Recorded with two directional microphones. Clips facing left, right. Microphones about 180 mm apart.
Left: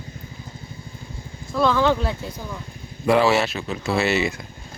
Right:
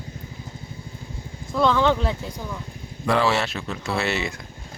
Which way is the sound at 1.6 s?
5° left (ahead or behind).